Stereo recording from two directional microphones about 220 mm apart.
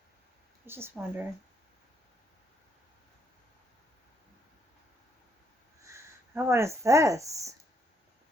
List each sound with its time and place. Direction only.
0.6 s speech: 10° right (ahead or behind)
5.8 s speech: 15° right (ahead or behind)